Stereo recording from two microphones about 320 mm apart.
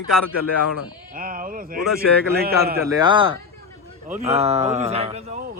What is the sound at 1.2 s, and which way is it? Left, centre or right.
Speech, right.